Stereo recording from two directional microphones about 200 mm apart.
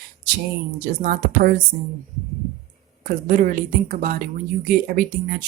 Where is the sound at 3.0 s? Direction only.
40° right (ahead or behind).